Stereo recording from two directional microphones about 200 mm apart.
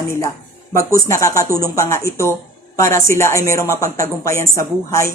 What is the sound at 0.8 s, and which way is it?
A woman's voice, 15° left (ahead or behind).